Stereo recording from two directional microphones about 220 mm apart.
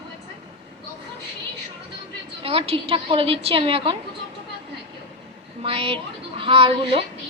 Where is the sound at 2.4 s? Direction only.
25° right (ahead or behind).